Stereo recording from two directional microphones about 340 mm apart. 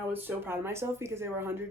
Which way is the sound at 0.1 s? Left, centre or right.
Centre.